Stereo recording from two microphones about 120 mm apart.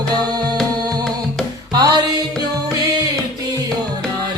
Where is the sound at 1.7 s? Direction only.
35° right (ahead or behind).